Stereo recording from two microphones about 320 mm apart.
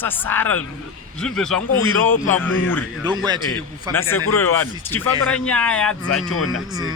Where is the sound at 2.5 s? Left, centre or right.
Left.